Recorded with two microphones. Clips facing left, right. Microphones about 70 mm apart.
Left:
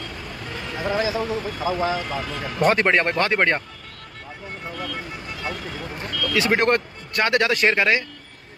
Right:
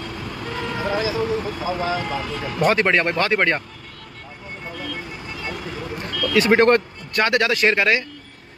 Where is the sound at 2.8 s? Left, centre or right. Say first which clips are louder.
Right 1 dB; left.